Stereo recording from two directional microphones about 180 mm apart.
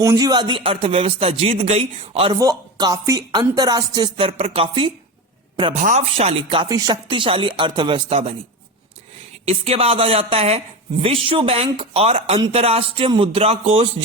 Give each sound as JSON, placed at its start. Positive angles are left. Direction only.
{"t": 0.0, "sound": "speech", "side_deg": -20}
{"t": 2.3, "sound": "speech", "side_deg": -20}
{"t": 5.8, "sound": "speech", "side_deg": -40}
{"t": 9.5, "sound": "speech", "side_deg": -35}